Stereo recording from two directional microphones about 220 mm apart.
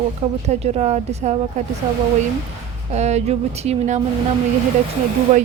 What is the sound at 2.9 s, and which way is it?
Speech, 30° right (ahead or behind).